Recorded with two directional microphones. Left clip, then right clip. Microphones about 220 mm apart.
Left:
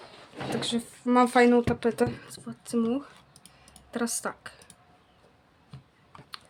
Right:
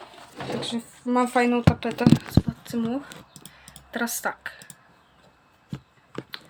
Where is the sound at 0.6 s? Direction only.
35° left (ahead or behind).